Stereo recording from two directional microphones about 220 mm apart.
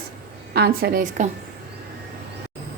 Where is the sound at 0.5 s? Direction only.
45° right (ahead or behind).